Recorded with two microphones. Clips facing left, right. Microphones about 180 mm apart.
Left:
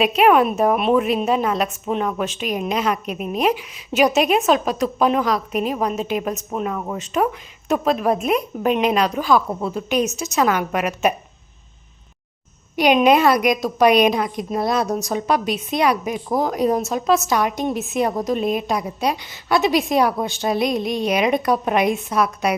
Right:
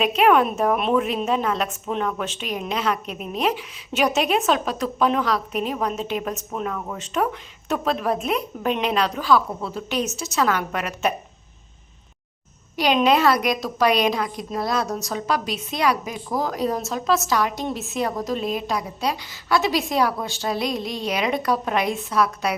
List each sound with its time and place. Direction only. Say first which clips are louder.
0.0 s a woman's voice: left 3 dB; 10° left (ahead or behind)
12.7 s a woman's voice: left 4 dB; 15° left (ahead or behind)